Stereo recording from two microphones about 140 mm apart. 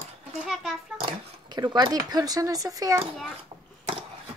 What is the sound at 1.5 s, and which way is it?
Speech, 25° right (ahead or behind).